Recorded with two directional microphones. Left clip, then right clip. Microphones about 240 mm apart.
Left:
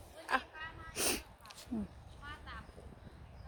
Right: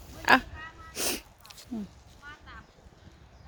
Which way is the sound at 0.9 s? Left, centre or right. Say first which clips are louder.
Right 4 dB; right.